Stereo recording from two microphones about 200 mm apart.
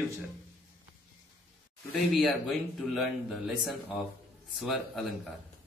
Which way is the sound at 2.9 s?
Centre (ahead or behind).